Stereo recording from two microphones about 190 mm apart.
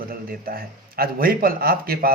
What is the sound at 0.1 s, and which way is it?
A man's voice, 50° right (ahead or behind).